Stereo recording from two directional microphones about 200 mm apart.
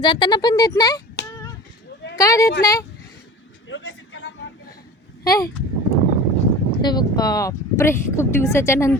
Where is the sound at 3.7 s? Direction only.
70° left (ahead or behind).